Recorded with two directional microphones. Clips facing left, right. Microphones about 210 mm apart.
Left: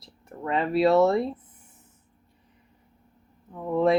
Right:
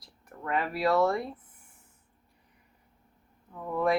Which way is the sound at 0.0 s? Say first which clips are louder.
Left 6 dB; 25° left (ahead or behind).